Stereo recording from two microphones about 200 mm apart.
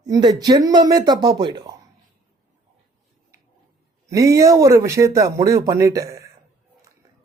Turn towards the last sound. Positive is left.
turn(degrees=-15)  # may be behind; listen again after turning